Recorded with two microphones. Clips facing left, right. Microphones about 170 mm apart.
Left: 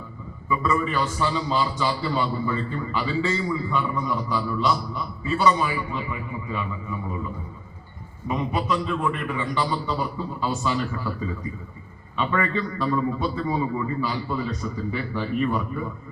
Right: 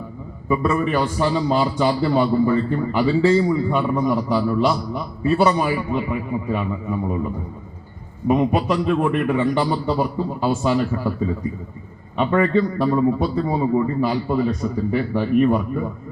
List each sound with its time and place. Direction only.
0.4 s a man's voice: 55° right (ahead or behind)
8.3 s a man's voice: 60° right (ahead or behind)
12.1 s a man's voice: 50° right (ahead or behind)
14.0 s a man's voice: 55° right (ahead or behind)